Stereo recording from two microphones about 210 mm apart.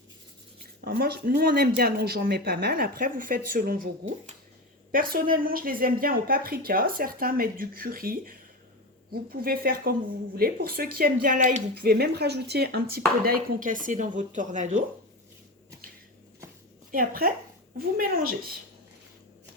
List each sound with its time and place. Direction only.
0.6 s speech: 50° right (ahead or behind)
16.9 s speech: 45° right (ahead or behind)